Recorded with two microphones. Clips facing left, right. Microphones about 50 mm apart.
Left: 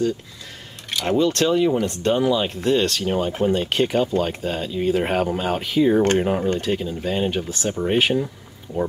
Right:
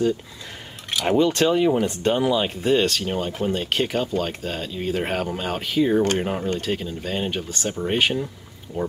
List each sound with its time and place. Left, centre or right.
0.9 s speech: centre